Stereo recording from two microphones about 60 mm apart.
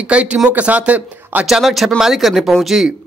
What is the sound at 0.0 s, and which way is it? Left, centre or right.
Speech, centre.